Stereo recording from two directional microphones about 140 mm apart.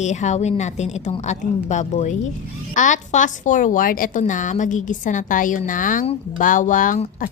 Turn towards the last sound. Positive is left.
turn(degrees=75)  # may be behind; listen again after turning